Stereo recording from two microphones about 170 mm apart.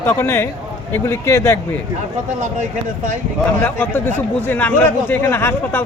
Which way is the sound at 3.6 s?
10° left (ahead or behind).